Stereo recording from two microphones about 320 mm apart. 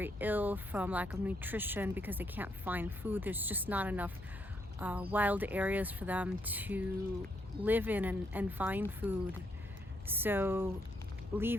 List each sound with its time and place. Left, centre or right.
0.0 s speech: centre